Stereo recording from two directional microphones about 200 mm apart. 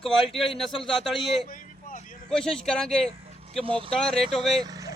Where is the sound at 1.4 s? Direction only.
45° left (ahead or behind).